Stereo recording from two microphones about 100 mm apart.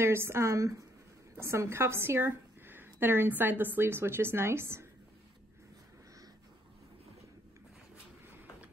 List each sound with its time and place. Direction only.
0.0 s a woman's voice: 25° right (ahead or behind)